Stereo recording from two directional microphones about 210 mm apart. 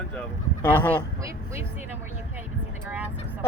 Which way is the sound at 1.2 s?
15° right (ahead or behind).